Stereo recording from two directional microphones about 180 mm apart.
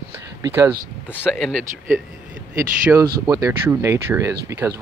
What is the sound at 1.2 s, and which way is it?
Speech, centre (ahead or behind).